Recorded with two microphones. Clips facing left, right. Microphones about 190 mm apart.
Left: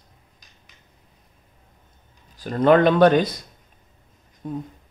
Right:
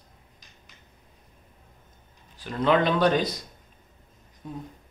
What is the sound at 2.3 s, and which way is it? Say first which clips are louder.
Speech: left 6 dB; 45° left (ahead or behind).